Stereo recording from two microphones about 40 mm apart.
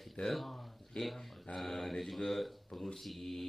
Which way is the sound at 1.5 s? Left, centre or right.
Centre.